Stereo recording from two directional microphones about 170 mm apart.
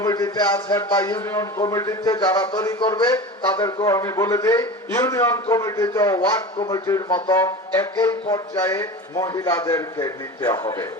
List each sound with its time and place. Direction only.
0.0 s a man's voice: 20° left (ahead or behind)